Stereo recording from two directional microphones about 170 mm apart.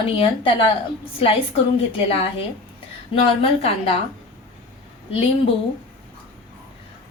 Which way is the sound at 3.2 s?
35° left (ahead or behind).